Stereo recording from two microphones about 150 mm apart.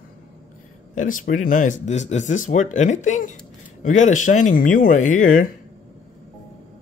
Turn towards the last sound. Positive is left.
turn(degrees=60)  # may be behind; listen again after turning